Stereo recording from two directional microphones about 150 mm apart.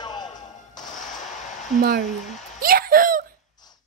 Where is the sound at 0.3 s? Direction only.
55° left (ahead or behind).